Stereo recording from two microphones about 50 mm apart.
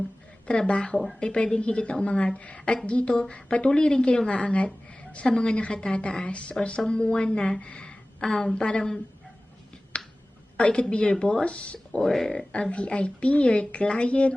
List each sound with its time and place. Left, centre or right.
0.7 s a woman's voice: left
9.9 s finger snapping: left
10.6 s a woman's voice: centre
11.9 s speech: centre
12.7 s a woman's voice: left